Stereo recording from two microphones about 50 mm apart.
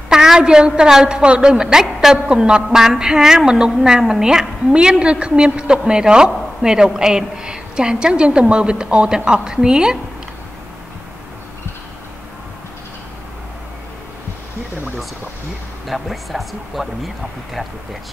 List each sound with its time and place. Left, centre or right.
0.1 s a woman's voice: centre
15.9 s speech: centre